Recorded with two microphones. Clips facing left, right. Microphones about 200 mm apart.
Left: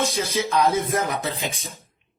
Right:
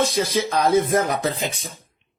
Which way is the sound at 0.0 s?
30° right (ahead or behind).